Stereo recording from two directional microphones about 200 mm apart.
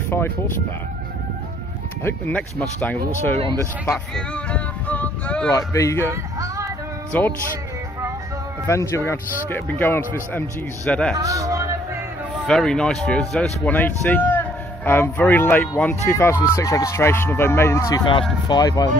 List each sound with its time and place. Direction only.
2.0 s speech: 10° left (ahead or behind)
3.3 s speech: 25° right (ahead or behind)
3.9 s music: 5° left (ahead or behind)
5.5 s speech: 15° left (ahead or behind)
6.4 s music: 15° right (ahead or behind)
7.1 s speech: 10° left (ahead or behind)
8.6 s speech: 15° left (ahead or behind)
11.1 s speech: 15° right (ahead or behind)
12.4 s speech: 5° left (ahead or behind); by 18.9 s 20° left (ahead or behind)